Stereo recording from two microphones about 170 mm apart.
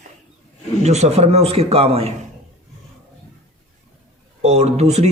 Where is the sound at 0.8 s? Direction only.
40° right (ahead or behind).